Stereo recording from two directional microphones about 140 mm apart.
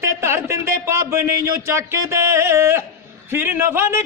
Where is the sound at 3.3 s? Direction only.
15° right (ahead or behind).